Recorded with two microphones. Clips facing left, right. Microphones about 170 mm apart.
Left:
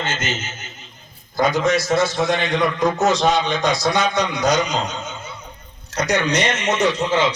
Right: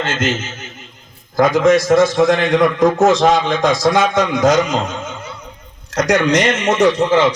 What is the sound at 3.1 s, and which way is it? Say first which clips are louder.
A man's voice: right 5 dB; 90° right.